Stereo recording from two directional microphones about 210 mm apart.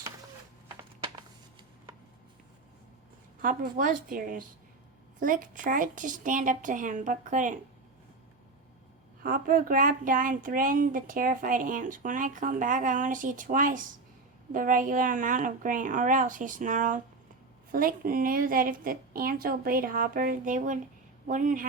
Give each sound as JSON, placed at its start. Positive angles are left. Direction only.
{"t": 3.4, "sound": "speech", "side_deg": -40}
{"t": 9.2, "sound": "speech", "side_deg": -40}